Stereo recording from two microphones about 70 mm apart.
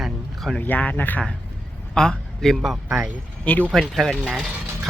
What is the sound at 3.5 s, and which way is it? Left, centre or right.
Speech, left.